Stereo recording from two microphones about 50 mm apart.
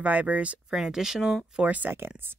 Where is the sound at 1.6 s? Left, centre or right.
Right.